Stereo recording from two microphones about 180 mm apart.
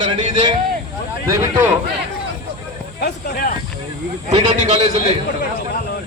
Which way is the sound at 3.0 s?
60° left (ahead or behind).